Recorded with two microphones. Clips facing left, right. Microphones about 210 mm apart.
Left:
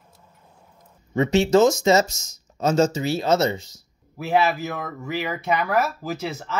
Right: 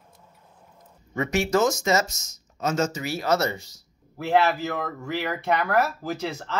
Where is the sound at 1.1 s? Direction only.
25° left (ahead or behind).